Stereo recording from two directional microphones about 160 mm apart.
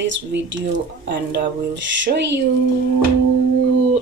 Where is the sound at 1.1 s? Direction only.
90° right.